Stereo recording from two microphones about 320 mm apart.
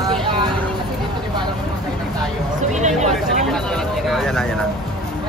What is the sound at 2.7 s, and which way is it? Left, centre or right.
Speech, right.